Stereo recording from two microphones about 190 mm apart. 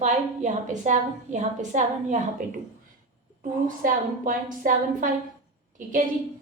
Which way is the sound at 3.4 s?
45° right (ahead or behind).